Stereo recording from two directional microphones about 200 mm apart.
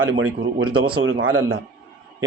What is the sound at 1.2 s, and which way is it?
Speech, 90° right.